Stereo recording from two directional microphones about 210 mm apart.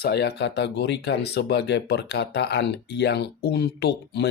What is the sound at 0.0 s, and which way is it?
Speech, 50° left (ahead or behind).